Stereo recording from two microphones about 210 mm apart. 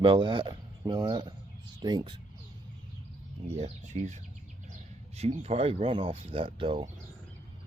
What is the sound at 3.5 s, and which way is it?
Speech, 35° right (ahead or behind).